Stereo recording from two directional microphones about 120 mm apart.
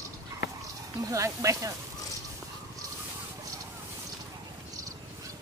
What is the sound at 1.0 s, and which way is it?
Speech, 25° right (ahead or behind).